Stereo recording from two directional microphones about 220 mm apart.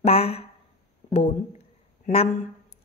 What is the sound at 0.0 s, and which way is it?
Speech, 30° left (ahead or behind).